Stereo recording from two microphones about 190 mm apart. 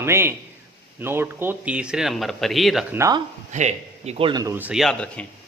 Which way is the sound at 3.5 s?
35° right (ahead or behind).